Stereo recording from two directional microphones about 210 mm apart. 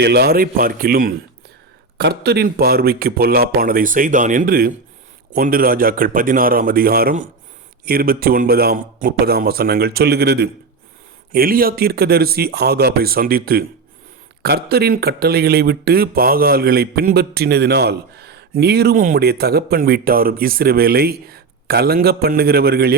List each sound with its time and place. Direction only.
0.0 s speech: 50° right (ahead or behind)